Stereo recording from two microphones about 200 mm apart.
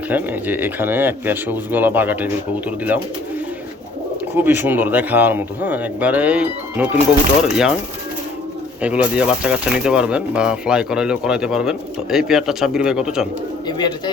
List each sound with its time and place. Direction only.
0.1 s speech: 10° right (ahead or behind)
4.4 s speech: 10° right (ahead or behind)
8.8 s speech: 5° right (ahead or behind)
13.7 s speech: 20° left (ahead or behind)